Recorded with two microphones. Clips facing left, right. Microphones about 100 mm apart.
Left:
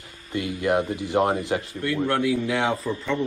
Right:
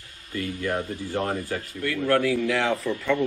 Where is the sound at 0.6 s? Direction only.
15° left (ahead or behind).